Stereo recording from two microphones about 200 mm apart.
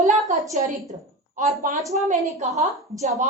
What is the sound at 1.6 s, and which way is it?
A woman's voice, 45° right (ahead or behind).